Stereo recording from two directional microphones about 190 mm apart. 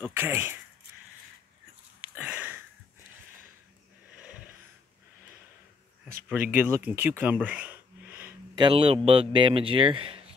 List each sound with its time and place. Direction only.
0.2 s speech: 10° right (ahead or behind)
2.1 s sniff: 10° right (ahead or behind)
6.2 s speech: 10° right (ahead or behind)
8.5 s a man's voice: 25° right (ahead or behind)